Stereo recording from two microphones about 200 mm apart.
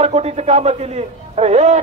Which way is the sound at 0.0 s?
30° right (ahead or behind).